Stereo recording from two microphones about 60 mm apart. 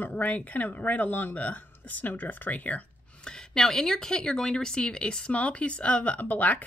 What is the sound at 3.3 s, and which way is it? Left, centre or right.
Speech, centre.